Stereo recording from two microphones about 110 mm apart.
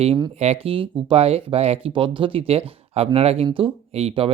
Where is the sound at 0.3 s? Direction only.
75° right (ahead or behind).